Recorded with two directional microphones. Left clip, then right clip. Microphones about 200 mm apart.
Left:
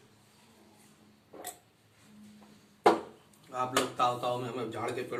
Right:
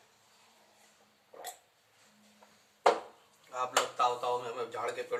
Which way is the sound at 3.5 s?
Centre (ahead or behind).